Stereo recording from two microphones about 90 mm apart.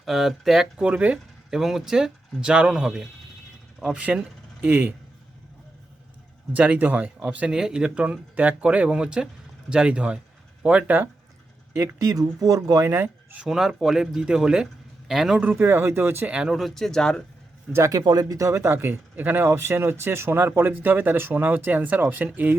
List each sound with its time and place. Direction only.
0.0 s speech: centre (ahead or behind); by 4.9 s 20° right (ahead or behind)
6.5 s speech: 15° right (ahead or behind)
11.7 s speech: 35° right (ahead or behind)
13.0 s speech: 15° right (ahead or behind)
15.4 s speech: 20° right (ahead or behind)
16.3 s speech: 5° right (ahead or behind)
17.7 s speech: 30° right (ahead or behind)
18.0 s speech: 45° right (ahead or behind); by 22.5 s 20° right (ahead or behind)